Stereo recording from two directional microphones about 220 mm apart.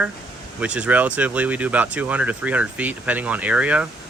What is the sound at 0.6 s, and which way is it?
Speech, 5° right (ahead or behind).